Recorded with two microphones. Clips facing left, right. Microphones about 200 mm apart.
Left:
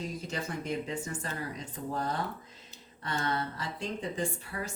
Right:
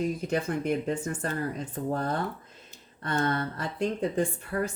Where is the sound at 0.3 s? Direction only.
55° right (ahead or behind).